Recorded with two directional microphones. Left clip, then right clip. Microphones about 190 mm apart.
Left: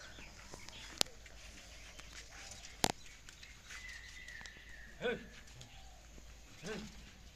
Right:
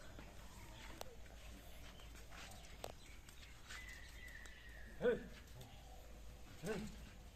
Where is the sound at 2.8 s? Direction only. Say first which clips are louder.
Left 17 dB; 45° left (ahead or behind).